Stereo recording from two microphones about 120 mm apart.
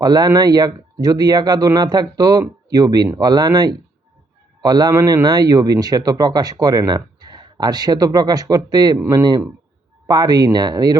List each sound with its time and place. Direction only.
0.0 s speech: 35° right (ahead or behind)